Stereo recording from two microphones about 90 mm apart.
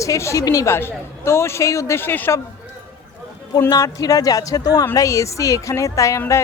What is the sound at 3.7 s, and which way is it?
Speech, 40° left (ahead or behind).